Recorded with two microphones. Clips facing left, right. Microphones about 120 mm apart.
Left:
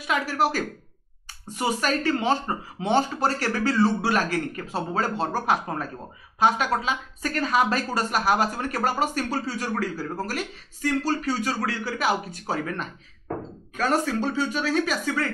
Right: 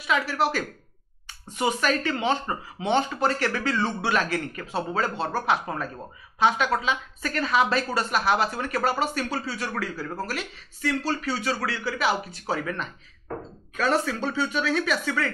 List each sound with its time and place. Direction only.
0.0 s a woman's voice: 45° left (ahead or behind)